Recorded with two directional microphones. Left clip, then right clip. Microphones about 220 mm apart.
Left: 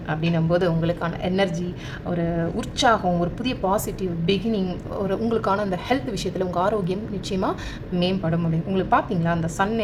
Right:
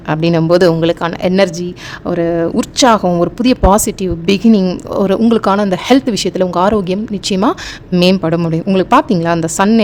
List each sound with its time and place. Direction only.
0.1 s speech: 55° right (ahead or behind)